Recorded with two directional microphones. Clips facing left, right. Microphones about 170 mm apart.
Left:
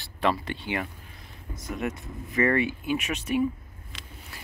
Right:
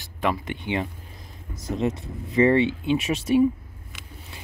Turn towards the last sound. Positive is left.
turn(degrees=-30)  # may be behind; listen again after turning